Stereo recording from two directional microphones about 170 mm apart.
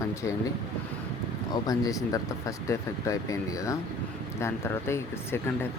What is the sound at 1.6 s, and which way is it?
Speech, 20° left (ahead or behind).